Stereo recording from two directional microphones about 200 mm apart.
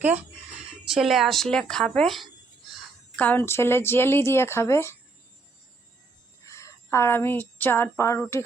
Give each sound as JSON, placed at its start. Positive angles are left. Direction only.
{"t": 0.9, "sound": "a woman's voice", "side_deg": 0}
{"t": 6.4, "sound": "a woman's voice", "side_deg": 15}